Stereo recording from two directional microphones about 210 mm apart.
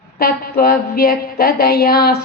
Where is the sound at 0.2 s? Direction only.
45° left (ahead or behind).